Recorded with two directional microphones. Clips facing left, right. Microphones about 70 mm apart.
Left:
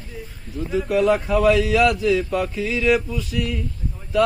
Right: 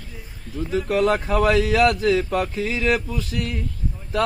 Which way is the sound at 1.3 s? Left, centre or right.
Right.